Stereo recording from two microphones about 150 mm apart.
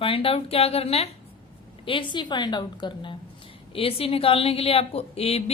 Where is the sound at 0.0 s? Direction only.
35° left (ahead or behind).